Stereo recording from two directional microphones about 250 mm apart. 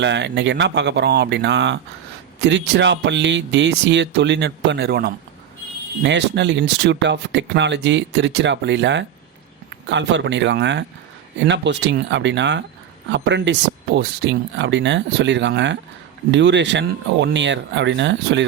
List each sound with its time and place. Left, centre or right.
0.0 s speech: right